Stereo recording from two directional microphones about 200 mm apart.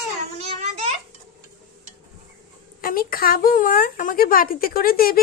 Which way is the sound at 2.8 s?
45° left (ahead or behind).